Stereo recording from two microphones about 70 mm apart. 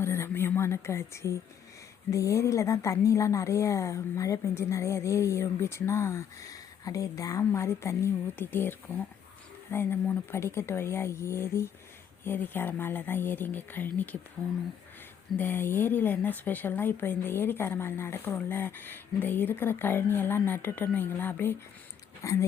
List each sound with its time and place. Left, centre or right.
0.0 s a sound: left
2.0 s speech: left
8.4 s speech: left
12.2 s speech: left
15.4 s speech: left
22.2 s speech: left